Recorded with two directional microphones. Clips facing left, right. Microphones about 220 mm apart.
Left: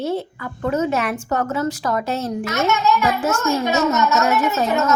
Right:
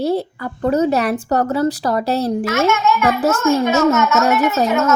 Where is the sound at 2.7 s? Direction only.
35° left (ahead or behind).